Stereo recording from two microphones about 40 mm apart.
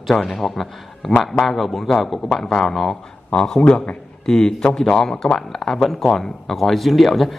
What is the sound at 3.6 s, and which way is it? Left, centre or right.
Speech, left.